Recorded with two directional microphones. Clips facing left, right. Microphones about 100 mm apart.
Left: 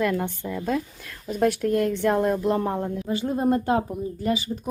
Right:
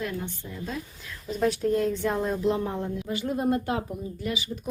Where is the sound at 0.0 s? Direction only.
60° left (ahead or behind).